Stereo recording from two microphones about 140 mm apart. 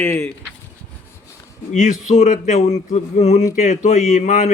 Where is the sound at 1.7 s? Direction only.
65° left (ahead or behind).